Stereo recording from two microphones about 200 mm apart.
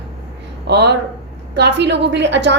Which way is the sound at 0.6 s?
55° right (ahead or behind).